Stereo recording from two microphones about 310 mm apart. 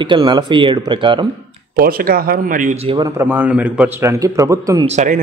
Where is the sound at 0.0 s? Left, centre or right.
Centre.